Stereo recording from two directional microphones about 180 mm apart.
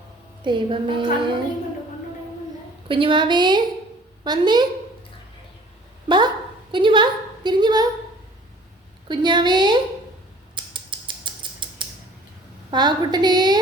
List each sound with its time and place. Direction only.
0.4 s a woman's voice: 25° right (ahead or behind)
2.9 s a woman's voice: 30° right (ahead or behind)
6.1 s a sound: 25° right (ahead or behind)
9.0 s a woman's voice: 25° right (ahead or behind)
10.5 s a sound: 25° right (ahead or behind)
12.7 s a woman's voice: 25° right (ahead or behind)